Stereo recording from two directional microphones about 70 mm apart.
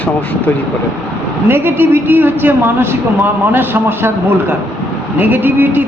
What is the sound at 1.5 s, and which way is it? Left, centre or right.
A man's voice, right.